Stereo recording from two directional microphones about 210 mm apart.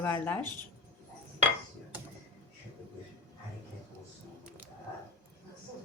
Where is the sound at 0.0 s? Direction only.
10° left (ahead or behind).